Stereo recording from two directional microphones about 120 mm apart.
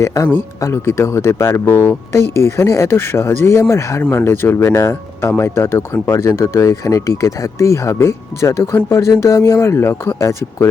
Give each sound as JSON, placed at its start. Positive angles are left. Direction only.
{"t": 0.0, "sound": "speech", "side_deg": 25}